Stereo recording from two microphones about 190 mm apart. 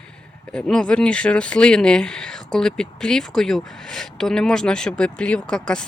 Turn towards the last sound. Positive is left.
turn(degrees=5)  # may be behind; listen again after turning